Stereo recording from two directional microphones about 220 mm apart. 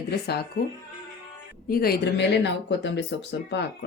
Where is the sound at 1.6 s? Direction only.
45° left (ahead or behind).